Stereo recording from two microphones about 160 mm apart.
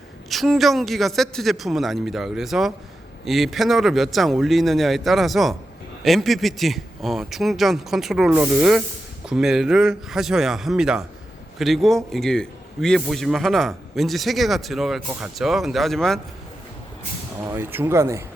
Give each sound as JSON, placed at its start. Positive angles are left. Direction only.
{"t": 0.3, "sound": "a man's voice", "side_deg": 0}
{"t": 17.4, "sound": "speech", "side_deg": -15}